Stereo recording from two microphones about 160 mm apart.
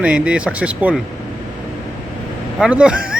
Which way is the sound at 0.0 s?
5° right (ahead or behind).